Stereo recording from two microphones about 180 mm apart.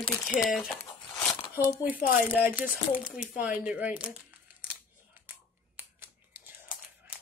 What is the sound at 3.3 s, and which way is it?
Speech, 5° right (ahead or behind).